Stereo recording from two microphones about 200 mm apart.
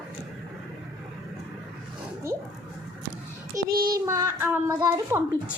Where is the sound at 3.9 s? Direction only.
15° right (ahead or behind).